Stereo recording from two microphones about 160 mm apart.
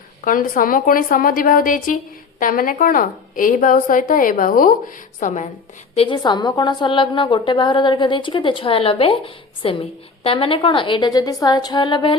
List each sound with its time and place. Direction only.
0.3 s a woman's voice: 60° left (ahead or behind)
5.9 s a woman's voice: 35° left (ahead or behind)